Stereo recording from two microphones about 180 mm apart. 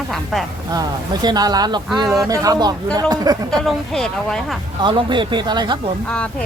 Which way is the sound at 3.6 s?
Centre (ahead or behind).